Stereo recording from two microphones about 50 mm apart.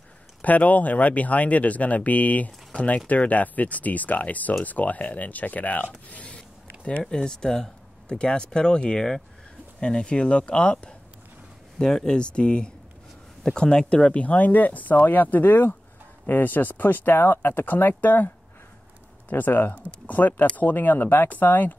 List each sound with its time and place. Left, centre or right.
0.4 s speech: left
6.0 s zipper: left
7.0 s speech: centre; by 21.7 s left